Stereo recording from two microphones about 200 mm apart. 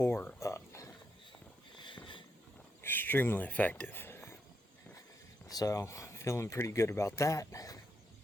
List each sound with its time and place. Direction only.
0.0 s a sound: 10° left (ahead or behind)
2.8 s speech: 10° left (ahead or behind)
5.5 s speech: 20° left (ahead or behind)